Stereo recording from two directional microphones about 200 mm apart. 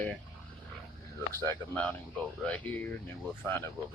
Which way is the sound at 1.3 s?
10° left (ahead or behind).